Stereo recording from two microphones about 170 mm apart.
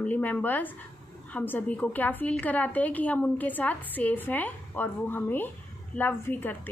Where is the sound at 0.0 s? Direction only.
10° left (ahead or behind).